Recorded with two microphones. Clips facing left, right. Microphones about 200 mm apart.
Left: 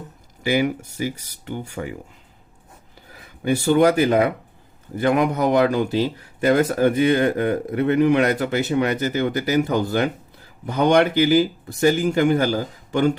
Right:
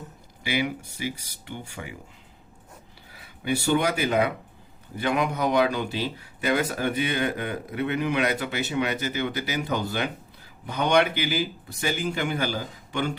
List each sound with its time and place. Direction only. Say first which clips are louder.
0.4 s speech: left 7 dB; 45° left (ahead or behind)
3.1 s speech: left 6 dB; 45° left (ahead or behind)